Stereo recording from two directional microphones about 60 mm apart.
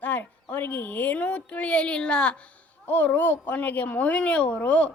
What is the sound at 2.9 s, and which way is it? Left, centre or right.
Speech, left.